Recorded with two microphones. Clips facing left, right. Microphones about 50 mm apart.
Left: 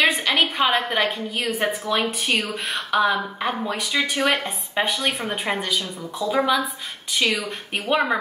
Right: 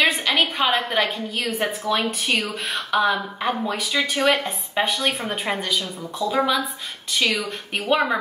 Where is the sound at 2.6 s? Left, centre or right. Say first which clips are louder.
Even; centre.